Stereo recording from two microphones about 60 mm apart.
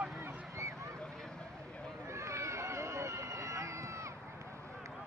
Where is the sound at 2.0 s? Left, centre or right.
Right.